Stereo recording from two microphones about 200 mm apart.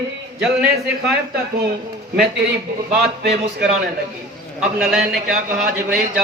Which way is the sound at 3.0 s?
55° right (ahead or behind).